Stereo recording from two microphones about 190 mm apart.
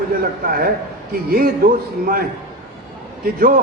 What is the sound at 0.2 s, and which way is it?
A man's voice, 50° right (ahead or behind).